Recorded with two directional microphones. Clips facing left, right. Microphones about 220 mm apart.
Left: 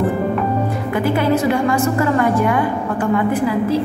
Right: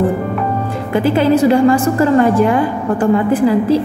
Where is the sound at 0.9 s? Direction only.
30° right (ahead or behind).